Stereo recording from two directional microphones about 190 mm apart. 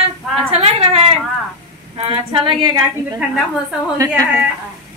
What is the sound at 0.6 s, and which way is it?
Speech, 35° right (ahead or behind).